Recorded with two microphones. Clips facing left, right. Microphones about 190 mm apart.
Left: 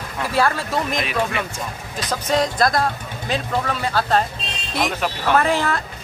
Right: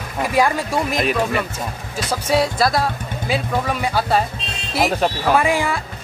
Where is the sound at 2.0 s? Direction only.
10° right (ahead or behind).